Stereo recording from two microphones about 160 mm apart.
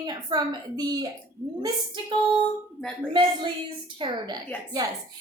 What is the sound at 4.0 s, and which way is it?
Speech, 25° right (ahead or behind).